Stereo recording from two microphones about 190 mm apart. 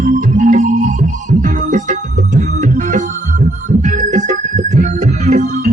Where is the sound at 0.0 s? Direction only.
45° right (ahead or behind).